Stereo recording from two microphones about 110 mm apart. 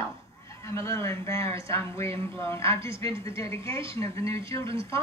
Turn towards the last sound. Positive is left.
turn(degrees=25)  # may be behind; listen again after turning